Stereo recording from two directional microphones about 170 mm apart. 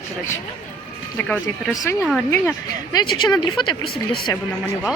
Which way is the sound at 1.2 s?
10° left (ahead or behind).